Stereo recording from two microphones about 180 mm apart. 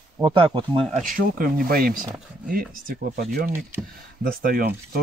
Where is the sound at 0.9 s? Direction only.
50° right (ahead or behind).